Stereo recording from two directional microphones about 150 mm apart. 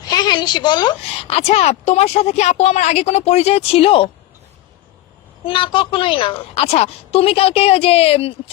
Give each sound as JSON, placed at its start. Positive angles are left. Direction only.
{"t": 0.0, "sound": "a sound", "side_deg": 25}
{"t": 1.3, "sound": "a woman's voice", "side_deg": 40}
{"t": 5.5, "sound": "a woman's voice", "side_deg": 35}